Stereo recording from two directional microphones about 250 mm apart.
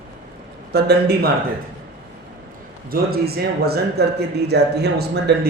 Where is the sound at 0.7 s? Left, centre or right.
Right.